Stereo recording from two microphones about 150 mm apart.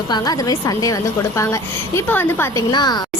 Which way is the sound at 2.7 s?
30° left (ahead or behind).